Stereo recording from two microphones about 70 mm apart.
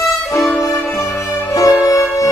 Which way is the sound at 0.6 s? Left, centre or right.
Left.